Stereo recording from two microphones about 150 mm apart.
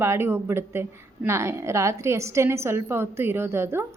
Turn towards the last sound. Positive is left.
turn(degrees=-15)  # may be behind; listen again after turning